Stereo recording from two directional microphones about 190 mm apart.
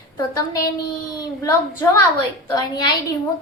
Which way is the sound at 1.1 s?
15° left (ahead or behind).